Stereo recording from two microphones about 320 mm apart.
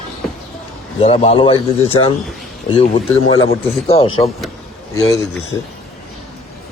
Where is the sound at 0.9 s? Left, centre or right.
Centre.